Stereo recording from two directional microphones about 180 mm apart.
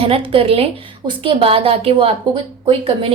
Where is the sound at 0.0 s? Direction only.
30° right (ahead or behind).